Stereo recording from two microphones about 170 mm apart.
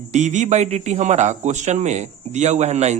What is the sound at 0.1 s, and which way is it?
Speech, 45° right (ahead or behind).